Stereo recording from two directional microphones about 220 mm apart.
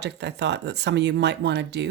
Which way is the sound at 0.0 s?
50° right (ahead or behind).